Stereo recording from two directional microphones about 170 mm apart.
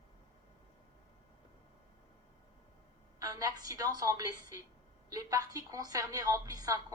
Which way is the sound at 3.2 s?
20° right (ahead or behind).